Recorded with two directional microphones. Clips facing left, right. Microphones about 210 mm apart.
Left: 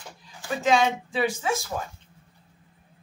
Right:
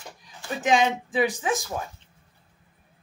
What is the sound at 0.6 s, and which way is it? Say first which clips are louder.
Speech: even; 15° right (ahead or behind).